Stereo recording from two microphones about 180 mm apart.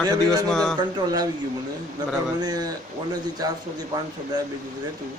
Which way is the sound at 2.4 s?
20° right (ahead or behind).